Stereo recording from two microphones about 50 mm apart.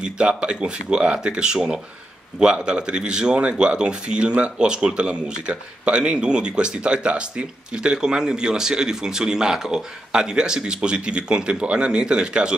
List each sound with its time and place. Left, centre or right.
0.0 s speech: centre